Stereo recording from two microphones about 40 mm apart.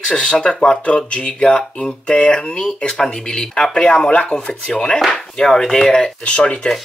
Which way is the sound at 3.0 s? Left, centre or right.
Centre.